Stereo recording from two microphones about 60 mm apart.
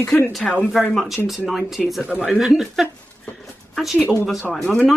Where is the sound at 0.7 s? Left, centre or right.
Centre.